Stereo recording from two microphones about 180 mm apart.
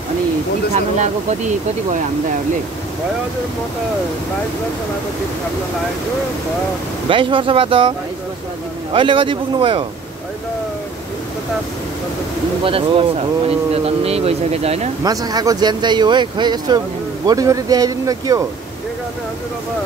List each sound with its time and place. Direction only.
0.7 s speech: 40° right (ahead or behind)
7.1 s speech: 30° right (ahead or behind)
8.9 s speech: 30° right (ahead or behind)
12.6 s speech: 30° right (ahead or behind)
15.0 s speech: 20° right (ahead or behind)